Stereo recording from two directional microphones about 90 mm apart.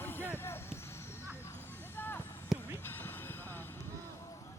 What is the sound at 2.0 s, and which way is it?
Basketball bounce, 25° left (ahead or behind).